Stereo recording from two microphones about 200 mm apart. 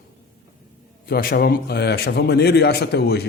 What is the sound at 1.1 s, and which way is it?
A man's voice, 45° left (ahead or behind).